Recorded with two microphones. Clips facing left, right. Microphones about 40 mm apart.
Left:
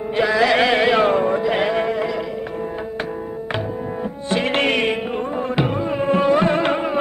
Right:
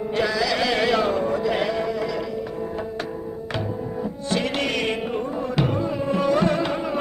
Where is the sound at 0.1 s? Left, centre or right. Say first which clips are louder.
Left 5 dB; left.